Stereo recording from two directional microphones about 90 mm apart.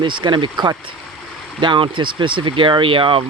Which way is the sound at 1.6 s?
65° right (ahead or behind).